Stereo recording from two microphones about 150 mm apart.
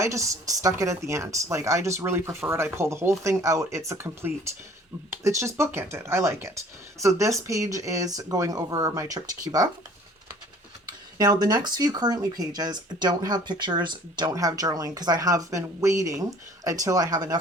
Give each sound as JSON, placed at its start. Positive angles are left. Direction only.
{"t": 0.0, "sound": "speech", "side_deg": -20}
{"t": 10.8, "sound": "speech", "side_deg": -25}